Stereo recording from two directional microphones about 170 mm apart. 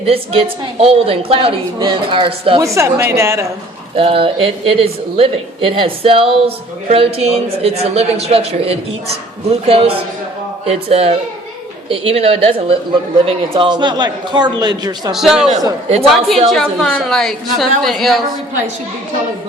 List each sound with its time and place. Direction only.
0.0 s a man's voice: 35° right (ahead or behind)
2.7 s a woman's voice: 15° right (ahead or behind)
3.9 s a man's voice: 35° right (ahead or behind)
15.1 s a woman's voice: centre (ahead or behind)